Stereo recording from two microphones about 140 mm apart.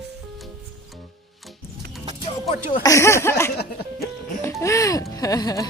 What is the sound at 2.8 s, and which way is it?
Speech, 20° left (ahead or behind).